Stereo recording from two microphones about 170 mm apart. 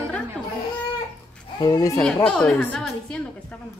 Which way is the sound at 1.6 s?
20° left (ahead or behind).